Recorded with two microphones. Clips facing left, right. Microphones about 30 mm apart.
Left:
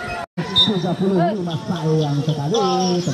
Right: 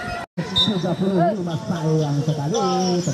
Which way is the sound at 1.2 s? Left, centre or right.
Left.